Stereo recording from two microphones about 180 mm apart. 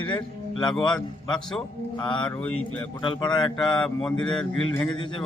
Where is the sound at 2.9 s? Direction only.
25° left (ahead or behind).